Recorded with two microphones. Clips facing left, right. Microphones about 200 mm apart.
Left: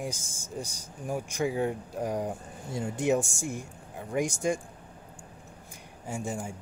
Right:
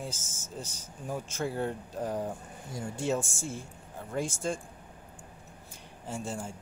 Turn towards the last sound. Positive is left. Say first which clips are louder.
# left 2 dB
turn(degrees=15)  # may be behind; listen again after turning